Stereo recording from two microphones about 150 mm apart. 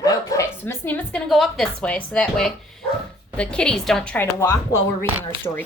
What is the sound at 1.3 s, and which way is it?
A woman's voice, centre (ahead or behind).